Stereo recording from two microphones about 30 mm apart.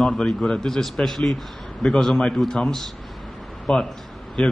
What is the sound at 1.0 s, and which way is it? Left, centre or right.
Speech, left.